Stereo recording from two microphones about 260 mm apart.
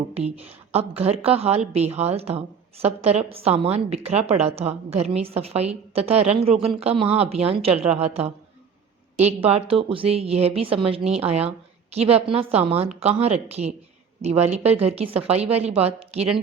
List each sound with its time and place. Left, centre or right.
0.1 s a woman's voice: right